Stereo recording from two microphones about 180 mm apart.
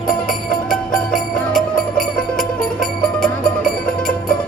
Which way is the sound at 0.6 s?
Centre (ahead or behind).